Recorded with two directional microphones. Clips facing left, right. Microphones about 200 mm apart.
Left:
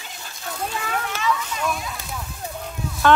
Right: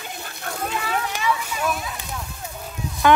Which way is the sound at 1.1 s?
10° right (ahead or behind).